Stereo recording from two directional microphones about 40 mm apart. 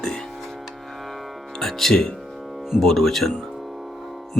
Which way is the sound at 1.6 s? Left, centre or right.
Centre.